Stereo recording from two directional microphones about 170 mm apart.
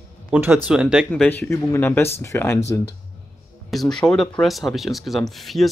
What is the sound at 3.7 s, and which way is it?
Speech, centre (ahead or behind).